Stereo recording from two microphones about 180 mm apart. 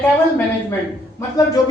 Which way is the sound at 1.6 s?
20° left (ahead or behind).